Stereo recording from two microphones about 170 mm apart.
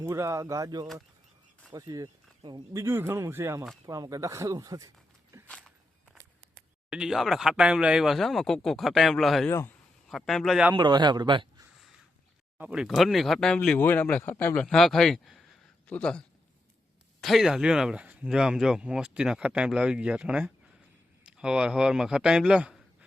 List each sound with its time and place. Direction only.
0.0 s speech: 15° right (ahead or behind)
5.5 s walk: 5° left (ahead or behind)
6.9 s speech: 5° right (ahead or behind)
9.5 s speech: 15° left (ahead or behind)
10.1 s speech: centre (ahead or behind)
10.8 s speech: 25° right (ahead or behind)
12.5 s speech: 5° right (ahead or behind)